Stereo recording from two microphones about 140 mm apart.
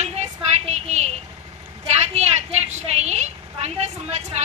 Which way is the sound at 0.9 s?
55° right (ahead or behind).